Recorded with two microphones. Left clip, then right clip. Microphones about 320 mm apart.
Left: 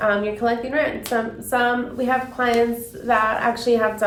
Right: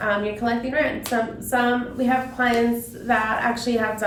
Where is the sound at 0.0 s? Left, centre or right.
Centre.